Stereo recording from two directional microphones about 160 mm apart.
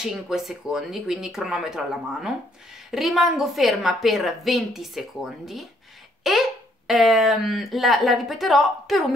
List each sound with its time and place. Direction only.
0.0 s a woman's voice: centre (ahead or behind)